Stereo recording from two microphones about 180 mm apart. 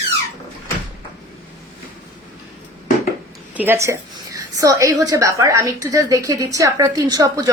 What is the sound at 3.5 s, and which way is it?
A woman's voice, 10° right (ahead or behind).